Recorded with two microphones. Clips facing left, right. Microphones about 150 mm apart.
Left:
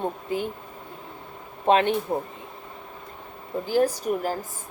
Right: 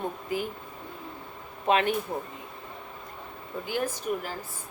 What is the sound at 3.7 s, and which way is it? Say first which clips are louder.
Speech: left 7 dB; 35° left (ahead or behind).